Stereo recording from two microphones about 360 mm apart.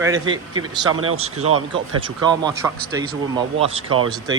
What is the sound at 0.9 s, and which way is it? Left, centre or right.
Speech, right.